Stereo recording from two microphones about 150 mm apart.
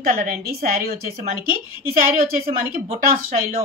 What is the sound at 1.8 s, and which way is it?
A woman's voice, 70° right (ahead or behind).